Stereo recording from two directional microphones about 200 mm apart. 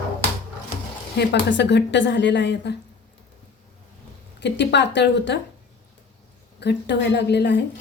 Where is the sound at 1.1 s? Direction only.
55° left (ahead or behind).